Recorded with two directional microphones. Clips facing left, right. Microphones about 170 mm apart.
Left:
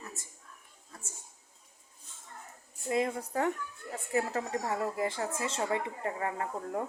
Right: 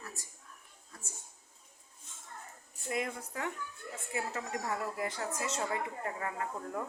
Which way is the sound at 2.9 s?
30° left (ahead or behind).